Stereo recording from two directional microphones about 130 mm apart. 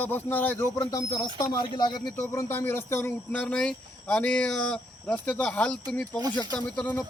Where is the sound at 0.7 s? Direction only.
30° left (ahead or behind).